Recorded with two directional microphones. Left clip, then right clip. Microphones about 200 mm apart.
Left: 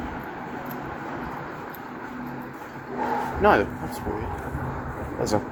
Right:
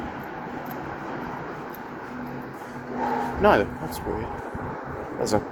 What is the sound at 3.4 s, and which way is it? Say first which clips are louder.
Speech: even; 5° right (ahead or behind).